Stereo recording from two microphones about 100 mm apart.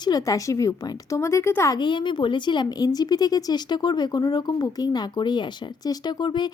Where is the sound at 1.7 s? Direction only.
50° left (ahead or behind).